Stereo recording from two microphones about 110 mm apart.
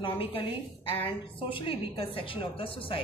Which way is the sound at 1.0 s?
50° left (ahead or behind).